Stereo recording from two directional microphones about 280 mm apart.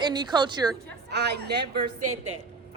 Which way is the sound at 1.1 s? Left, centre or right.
Right.